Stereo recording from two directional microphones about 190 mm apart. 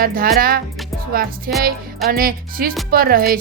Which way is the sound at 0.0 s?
50° right (ahead or behind).